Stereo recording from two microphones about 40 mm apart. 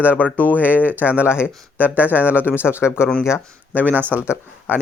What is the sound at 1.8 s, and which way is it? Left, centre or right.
Speech, right.